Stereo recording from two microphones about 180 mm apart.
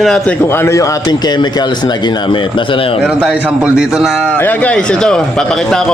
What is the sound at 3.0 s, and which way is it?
A man's voice, 5° right (ahead or behind).